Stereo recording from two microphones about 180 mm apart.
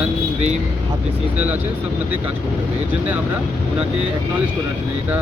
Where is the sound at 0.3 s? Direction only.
40° right (ahead or behind).